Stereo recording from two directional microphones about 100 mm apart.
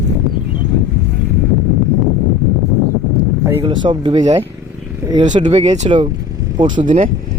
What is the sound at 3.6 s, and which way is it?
Speech, 55° right (ahead or behind).